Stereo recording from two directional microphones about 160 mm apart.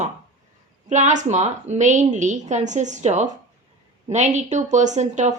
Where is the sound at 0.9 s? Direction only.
50° right (ahead or behind).